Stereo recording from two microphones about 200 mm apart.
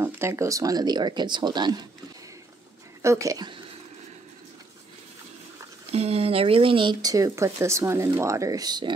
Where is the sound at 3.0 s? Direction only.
15° right (ahead or behind).